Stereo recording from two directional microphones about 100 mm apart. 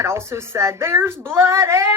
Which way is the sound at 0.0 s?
30° right (ahead or behind).